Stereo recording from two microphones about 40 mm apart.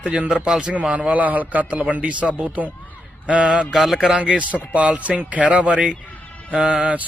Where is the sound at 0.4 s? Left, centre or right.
Centre.